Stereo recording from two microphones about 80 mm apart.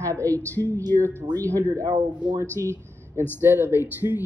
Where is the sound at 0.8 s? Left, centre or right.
Right.